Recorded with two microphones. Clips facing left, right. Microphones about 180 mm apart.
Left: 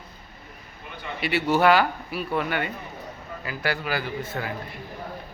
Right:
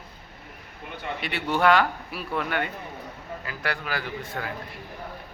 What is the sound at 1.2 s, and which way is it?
A man's voice, 5° left (ahead or behind).